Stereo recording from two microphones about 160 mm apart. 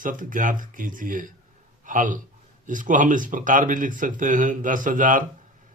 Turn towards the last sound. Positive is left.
turn(degrees=-55)  # may be behind; listen again after turning